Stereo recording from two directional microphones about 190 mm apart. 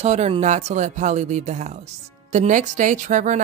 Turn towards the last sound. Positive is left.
turn(degrees=-40)  # may be behind; listen again after turning